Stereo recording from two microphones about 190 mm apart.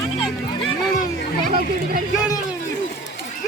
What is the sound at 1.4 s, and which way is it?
Chatter, 50° right (ahead or behind).